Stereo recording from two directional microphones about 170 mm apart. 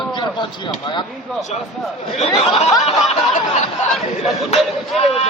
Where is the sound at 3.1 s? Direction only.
45° left (ahead or behind).